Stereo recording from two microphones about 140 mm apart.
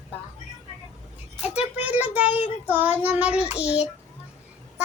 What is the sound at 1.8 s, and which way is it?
Child singing, 10° right (ahead or behind).